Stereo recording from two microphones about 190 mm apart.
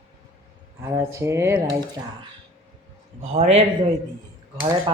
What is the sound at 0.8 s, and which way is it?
Speech, 15° right (ahead or behind).